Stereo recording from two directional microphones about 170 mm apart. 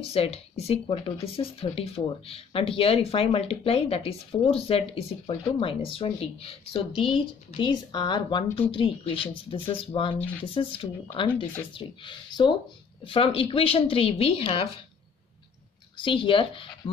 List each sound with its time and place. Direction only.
0.0 s speech: 35° left (ahead or behind)
16.0 s speech: 30° left (ahead or behind)